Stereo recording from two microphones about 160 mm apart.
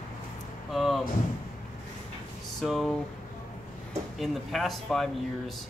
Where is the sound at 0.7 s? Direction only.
Centre (ahead or behind).